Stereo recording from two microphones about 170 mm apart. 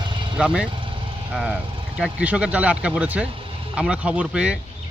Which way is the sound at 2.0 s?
5° right (ahead or behind).